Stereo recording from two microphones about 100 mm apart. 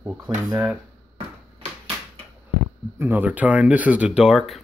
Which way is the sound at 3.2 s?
15° right (ahead or behind).